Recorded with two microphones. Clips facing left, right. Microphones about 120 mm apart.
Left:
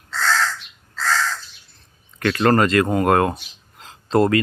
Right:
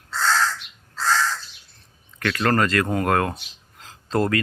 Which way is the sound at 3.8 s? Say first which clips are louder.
Left 5 dB; 20° left (ahead or behind).